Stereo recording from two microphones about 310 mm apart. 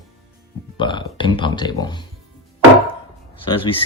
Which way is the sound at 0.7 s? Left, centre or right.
Centre.